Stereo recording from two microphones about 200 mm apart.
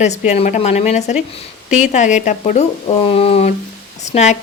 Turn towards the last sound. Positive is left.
turn(degrees=35)  # may be behind; listen again after turning